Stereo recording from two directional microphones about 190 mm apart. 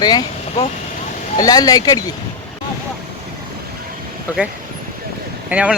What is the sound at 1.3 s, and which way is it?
Speech, 20° left (ahead or behind).